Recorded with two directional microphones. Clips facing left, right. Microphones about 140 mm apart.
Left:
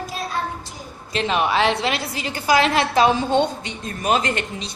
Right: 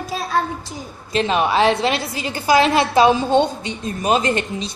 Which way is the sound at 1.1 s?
35° right (ahead or behind).